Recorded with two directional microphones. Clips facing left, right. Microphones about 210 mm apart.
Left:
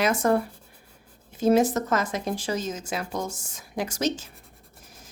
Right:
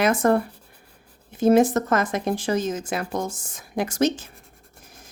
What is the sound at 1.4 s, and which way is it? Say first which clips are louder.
Speech: right 3 dB; 55° right (ahead or behind).